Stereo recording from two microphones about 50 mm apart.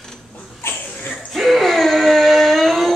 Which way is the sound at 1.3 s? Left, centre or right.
Centre.